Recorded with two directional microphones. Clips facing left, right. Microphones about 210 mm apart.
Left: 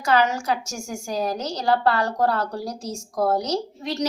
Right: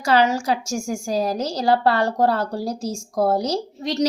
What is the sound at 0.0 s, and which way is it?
A woman's voice, 30° right (ahead or behind).